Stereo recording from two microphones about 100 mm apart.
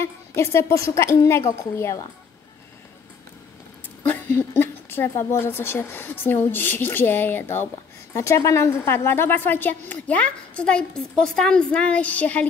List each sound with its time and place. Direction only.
0.0 s a woman's voice: 30° left (ahead or behind)
4.0 s a woman's voice: 20° left (ahead or behind)